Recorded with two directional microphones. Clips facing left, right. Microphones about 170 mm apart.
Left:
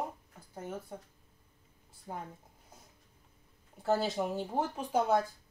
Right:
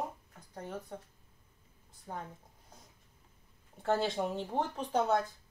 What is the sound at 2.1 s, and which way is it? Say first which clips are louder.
Speech: even; 15° left (ahead or behind).